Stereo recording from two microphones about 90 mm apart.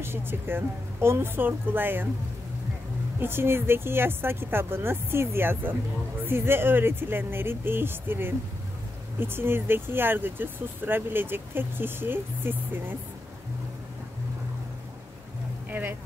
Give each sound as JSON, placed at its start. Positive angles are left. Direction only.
{"t": 0.0, "sound": "speech", "side_deg": -25}
{"t": 3.2, "sound": "speech", "side_deg": -25}
{"t": 15.8, "sound": "music", "side_deg": -20}